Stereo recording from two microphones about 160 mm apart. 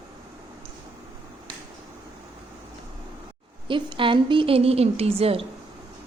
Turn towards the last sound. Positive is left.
turn(degrees=-35)  # may be behind; listen again after turning